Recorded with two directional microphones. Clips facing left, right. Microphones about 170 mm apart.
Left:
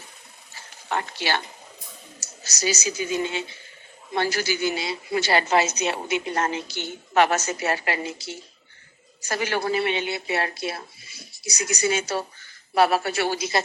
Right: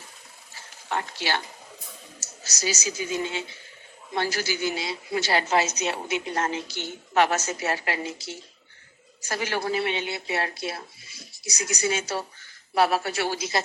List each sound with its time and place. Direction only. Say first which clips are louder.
0.9 s speech: left 2 dB; 65° left (ahead or behind)
2.2 s a sound: left 3 dB; 65° left (ahead or behind)
4.1 s a woman's voice: left 3 dB; 65° left (ahead or behind)
9.3 s a woman's voice: left 2 dB; 65° left (ahead or behind)